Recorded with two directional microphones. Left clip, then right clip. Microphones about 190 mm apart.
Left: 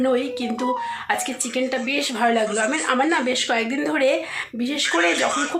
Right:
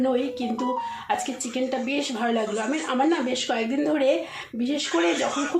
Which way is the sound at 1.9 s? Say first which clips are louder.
Left 5 dB; 5° left (ahead or behind).